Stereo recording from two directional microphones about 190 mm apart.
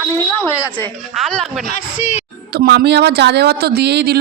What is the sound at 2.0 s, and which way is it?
Speech, 35° left (ahead or behind).